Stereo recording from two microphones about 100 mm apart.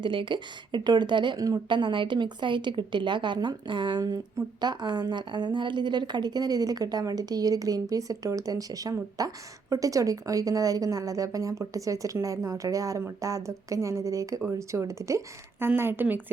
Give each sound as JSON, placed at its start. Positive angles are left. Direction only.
{"t": 0.0, "sound": "a woman's voice", "side_deg": -55}
{"t": 1.7, "sound": "a woman's voice", "side_deg": -55}
{"t": 4.0, "sound": "a woman's voice", "side_deg": -40}